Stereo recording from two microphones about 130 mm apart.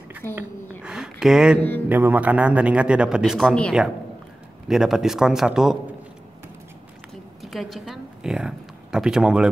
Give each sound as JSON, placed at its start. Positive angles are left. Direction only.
{"t": 0.2, "sound": "a woman's voice", "side_deg": 15}
{"t": 0.8, "sound": "a sound", "side_deg": -5}
{"t": 1.9, "sound": "a man's voice", "side_deg": -15}
{"t": 7.4, "sound": "a woman's voice", "side_deg": 0}